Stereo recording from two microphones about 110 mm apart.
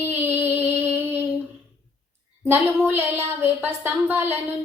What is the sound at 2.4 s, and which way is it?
Speech, 20° right (ahead or behind).